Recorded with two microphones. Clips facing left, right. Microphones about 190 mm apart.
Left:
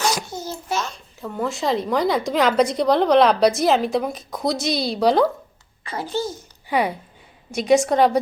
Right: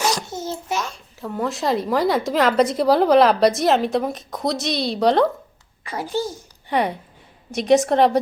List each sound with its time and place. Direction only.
0.3 s a sound: 25° right (ahead or behind)
0.8 s a child's voice: 5° right (ahead or behind)
5.8 s a child's voice: 15° right (ahead or behind)
6.7 s a child's voice: 5° left (ahead or behind)